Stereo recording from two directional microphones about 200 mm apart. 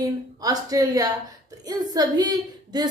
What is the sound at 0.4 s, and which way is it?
A woman's voice, 20° right (ahead or behind).